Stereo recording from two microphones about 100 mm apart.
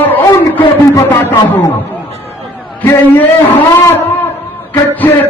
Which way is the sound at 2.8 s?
25° left (ahead or behind).